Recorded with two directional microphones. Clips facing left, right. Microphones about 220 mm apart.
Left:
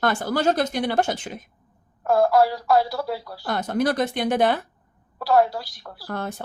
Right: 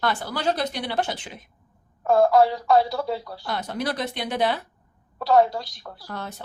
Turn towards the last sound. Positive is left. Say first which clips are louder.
# left 5 dB
turn(degrees=50)  # may be behind; listen again after turning